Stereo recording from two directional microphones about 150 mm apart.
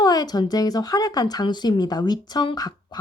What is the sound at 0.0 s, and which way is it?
A woman's voice, 25° left (ahead or behind).